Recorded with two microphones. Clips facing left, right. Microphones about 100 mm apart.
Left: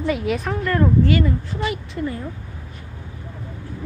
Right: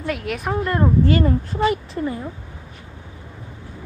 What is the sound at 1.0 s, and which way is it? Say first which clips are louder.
A woman's voice: right 1 dB; 40° right (ahead or behind).